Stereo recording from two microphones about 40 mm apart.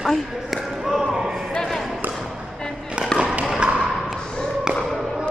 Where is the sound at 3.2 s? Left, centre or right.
Right.